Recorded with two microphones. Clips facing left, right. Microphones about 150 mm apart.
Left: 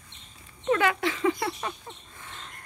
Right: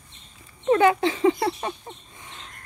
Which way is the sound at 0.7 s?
25° right (ahead or behind).